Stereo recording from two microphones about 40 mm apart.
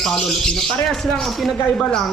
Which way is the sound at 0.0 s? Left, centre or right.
Centre.